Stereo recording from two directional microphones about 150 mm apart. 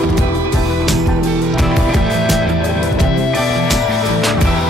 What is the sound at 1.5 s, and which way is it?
Music, centre (ahead or behind).